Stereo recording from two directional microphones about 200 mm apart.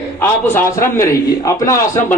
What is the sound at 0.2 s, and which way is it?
A man's voice, 10° left (ahead or behind).